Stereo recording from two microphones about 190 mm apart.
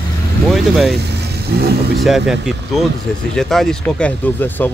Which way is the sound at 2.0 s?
Centre (ahead or behind).